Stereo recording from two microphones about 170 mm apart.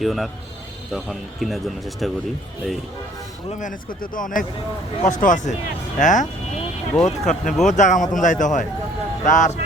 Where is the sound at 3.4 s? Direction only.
50° left (ahead or behind).